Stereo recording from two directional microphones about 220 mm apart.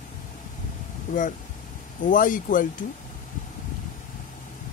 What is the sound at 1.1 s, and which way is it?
Speech, 35° left (ahead or behind).